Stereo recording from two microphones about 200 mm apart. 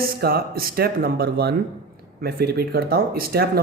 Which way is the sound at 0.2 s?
50° right (ahead or behind).